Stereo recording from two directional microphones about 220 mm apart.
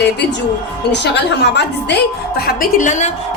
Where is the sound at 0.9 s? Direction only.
50° left (ahead or behind); by 3.1 s 35° left (ahead or behind).